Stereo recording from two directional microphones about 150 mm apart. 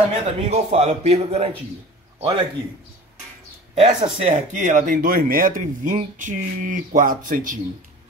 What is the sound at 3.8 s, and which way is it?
Speech, 50° right (ahead or behind).